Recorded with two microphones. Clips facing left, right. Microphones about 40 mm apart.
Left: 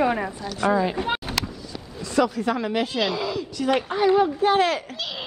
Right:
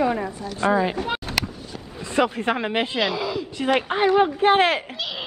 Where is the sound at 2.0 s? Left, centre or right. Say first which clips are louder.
Even; right.